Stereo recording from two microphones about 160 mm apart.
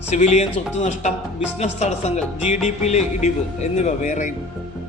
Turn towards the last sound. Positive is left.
turn(degrees=50)  # may be behind; listen again after turning